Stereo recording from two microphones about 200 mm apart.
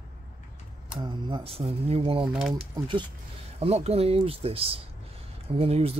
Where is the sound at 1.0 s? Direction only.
20° right (ahead or behind).